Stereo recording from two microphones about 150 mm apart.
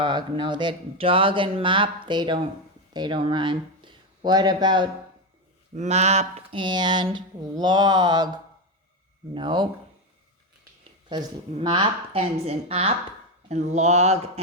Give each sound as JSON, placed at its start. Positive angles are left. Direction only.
{"t": 0.0, "sound": "speech", "side_deg": -30}
{"t": 5.7, "sound": "speech", "side_deg": -50}
{"t": 9.3, "sound": "speech", "side_deg": -30}
{"t": 11.5, "sound": "speech", "side_deg": -30}